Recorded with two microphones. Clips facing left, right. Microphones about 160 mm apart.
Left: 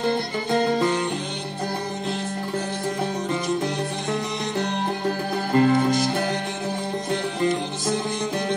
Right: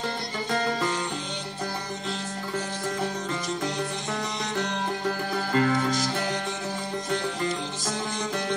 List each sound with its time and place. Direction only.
5.5 s music: 20° left (ahead or behind)
5.9 s music: 60° left (ahead or behind)